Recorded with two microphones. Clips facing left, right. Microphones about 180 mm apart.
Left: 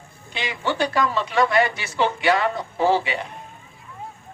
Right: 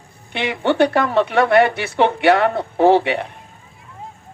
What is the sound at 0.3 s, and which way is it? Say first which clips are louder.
A woman's voice: right 8 dB; 60° right (ahead or behind).